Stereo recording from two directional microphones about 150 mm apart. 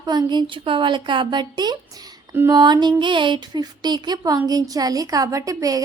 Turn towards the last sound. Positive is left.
turn(degrees=-20)  # may be behind; listen again after turning